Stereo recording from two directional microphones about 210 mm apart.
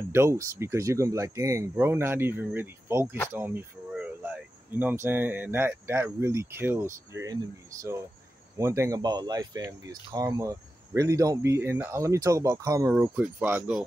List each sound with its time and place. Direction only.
0.1 s speech: 10° right (ahead or behind)